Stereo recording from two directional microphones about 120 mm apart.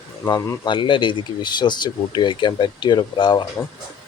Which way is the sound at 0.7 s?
40° left (ahead or behind).